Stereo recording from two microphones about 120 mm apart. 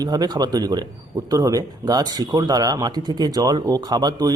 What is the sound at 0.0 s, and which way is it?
Speech, 35° right (ahead or behind).